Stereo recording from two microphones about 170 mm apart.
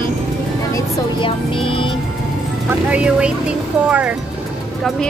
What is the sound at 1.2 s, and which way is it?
Speech, 30° left (ahead or behind).